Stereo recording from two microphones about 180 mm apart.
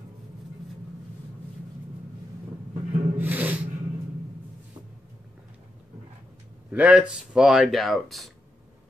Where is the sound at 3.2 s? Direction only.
10° right (ahead or behind).